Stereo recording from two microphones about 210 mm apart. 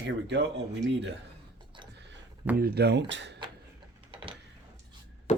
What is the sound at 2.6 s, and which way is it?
Speech, 50° right (ahead or behind).